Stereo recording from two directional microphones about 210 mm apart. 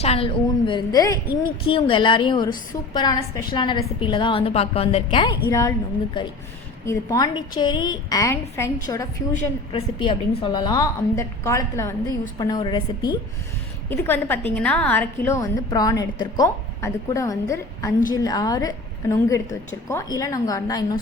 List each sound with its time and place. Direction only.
0.0 s a woman's voice: 30° left (ahead or behind)
9.3 s a woman's voice: 35° left (ahead or behind)
10.0 s a woman's voice: 25° left (ahead or behind)
13.9 s a woman's voice: 10° left (ahead or behind)